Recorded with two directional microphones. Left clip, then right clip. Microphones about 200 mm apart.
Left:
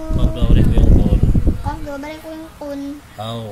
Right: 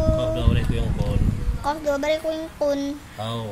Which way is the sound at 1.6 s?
55° right (ahead or behind).